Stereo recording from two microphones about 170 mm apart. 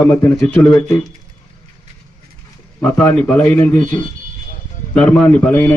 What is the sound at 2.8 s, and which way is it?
A man's voice, 10° left (ahead or behind).